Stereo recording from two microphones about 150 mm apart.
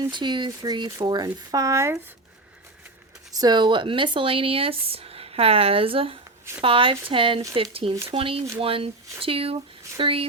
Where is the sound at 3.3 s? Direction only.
30° right (ahead or behind).